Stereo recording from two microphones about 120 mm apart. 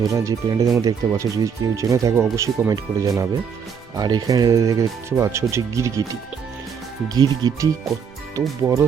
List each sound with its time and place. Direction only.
0.1 s speech: 30° right (ahead or behind)
7.1 s speech: 35° right (ahead or behind)
8.6 s speech: 15° right (ahead or behind)